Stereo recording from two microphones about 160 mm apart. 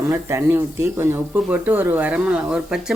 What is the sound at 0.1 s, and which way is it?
Speech, 15° right (ahead or behind).